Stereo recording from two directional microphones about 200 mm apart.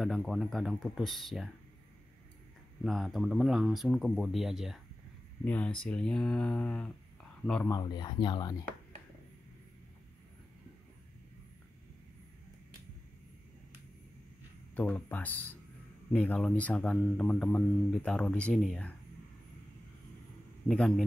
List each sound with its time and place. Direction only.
0.0 s speech: centre (ahead or behind)
2.8 s speech: centre (ahead or behind)
7.7 s speech: 20° left (ahead or behind)
14.8 s speech: 5° left (ahead or behind)
20.6 s speech: 5° left (ahead or behind)